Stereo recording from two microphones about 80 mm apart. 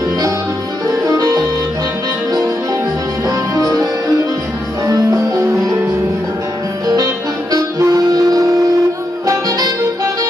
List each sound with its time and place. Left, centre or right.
0.8 s music: right
3.3 s music: right
7.5 s music: right
9.2 s music: right